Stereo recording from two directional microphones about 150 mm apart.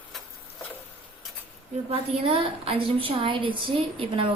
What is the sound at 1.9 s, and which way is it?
A woman's voice, 40° right (ahead or behind).